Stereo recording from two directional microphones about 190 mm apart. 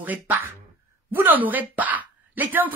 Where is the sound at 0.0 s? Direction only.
10° right (ahead or behind).